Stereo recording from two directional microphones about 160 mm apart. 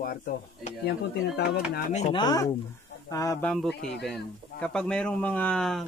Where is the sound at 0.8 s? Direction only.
90° left.